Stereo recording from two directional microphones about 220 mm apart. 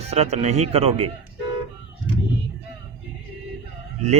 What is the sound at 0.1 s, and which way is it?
Speech, 30° right (ahead or behind).